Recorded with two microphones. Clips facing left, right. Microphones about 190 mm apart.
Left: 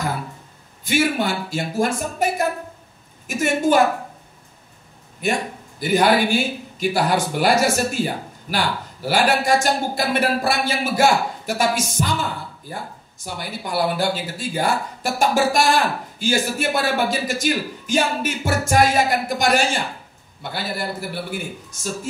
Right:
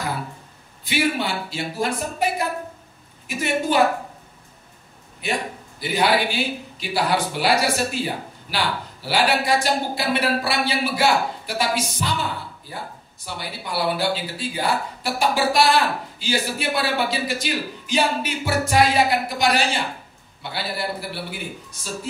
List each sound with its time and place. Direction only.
0.8 s speech: 45° left (ahead or behind)
5.2 s speech: 45° left (ahead or behind)